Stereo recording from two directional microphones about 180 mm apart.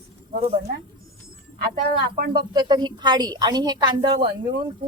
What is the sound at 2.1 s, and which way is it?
Speech, 60° right (ahead or behind).